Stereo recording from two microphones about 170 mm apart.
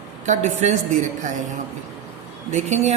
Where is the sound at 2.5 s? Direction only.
40° right (ahead or behind).